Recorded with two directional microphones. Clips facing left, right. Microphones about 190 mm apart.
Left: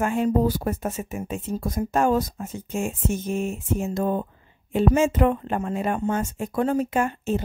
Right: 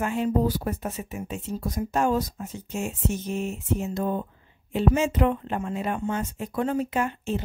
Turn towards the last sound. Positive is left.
turn(degrees=45)  # may be behind; listen again after turning